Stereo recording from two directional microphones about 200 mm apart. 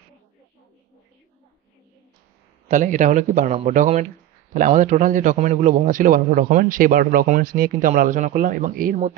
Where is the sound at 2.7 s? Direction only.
40° right (ahead or behind).